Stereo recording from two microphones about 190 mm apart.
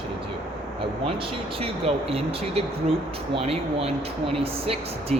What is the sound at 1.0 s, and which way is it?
Speech, 30° right (ahead or behind).